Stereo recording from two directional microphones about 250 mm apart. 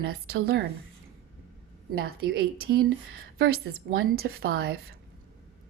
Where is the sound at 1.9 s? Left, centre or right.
Right.